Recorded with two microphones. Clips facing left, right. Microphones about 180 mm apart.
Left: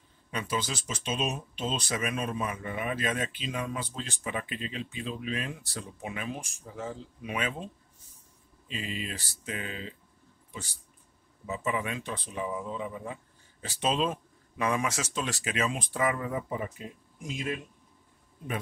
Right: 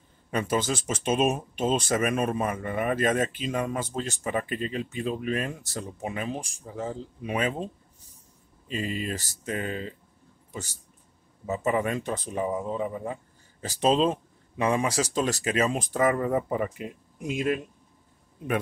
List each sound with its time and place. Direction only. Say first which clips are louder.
0.3 s speech: right 6 dB; 50° right (ahead or behind)
8.6 s speech: right 6 dB; 45° right (ahead or behind); by 17.5 s 60° right (ahead or behind)